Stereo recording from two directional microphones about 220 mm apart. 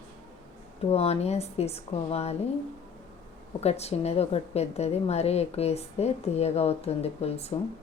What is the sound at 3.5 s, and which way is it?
A woman's voice, 30° left (ahead or behind).